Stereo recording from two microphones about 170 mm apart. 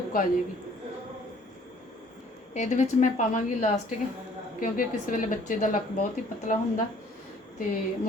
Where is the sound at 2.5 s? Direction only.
45° left (ahead or behind).